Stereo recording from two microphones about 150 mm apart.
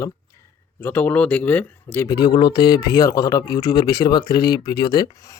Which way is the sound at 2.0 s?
30° left (ahead or behind).